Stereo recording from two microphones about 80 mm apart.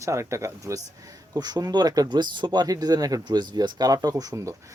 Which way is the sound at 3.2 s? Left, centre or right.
Right.